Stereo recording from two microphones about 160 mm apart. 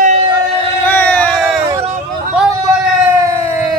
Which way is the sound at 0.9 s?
10° left (ahead or behind).